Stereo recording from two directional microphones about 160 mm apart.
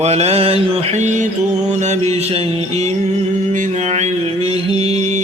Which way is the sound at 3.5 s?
45° right (ahead or behind).